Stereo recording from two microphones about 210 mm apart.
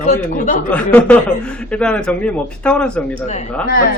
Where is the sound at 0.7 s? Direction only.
5° left (ahead or behind).